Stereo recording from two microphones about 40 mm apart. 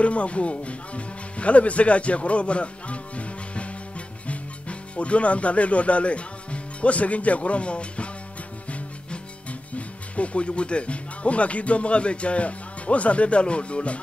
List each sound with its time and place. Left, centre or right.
0.0 s speech: left